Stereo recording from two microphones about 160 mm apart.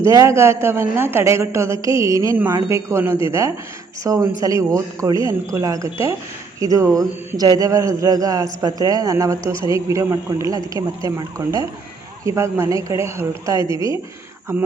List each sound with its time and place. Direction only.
0.0 s a woman's voice: 20° right (ahead or behind)